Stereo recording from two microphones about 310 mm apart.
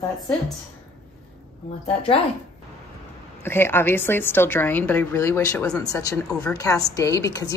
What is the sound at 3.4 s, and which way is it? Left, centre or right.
A woman's voice, centre.